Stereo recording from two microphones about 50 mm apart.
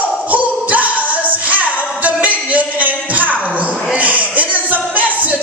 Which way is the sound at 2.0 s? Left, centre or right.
Right.